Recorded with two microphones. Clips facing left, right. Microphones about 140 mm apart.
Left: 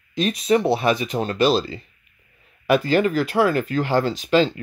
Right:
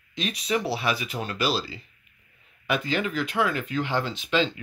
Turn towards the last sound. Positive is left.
turn(degrees=40)  # may be behind; listen again after turning